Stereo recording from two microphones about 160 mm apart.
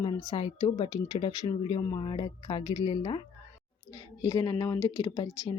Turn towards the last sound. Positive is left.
turn(degrees=25)  # may be behind; listen again after turning